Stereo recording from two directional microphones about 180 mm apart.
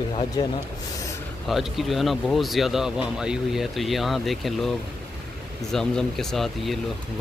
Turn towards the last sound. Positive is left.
turn(degrees=0)  # may be behind; listen again after turning